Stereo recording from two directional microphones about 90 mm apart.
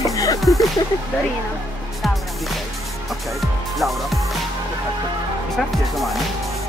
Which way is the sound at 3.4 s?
Centre (ahead or behind).